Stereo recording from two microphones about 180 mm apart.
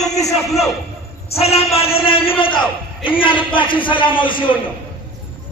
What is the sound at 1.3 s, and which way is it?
A man's voice, 35° left (ahead or behind).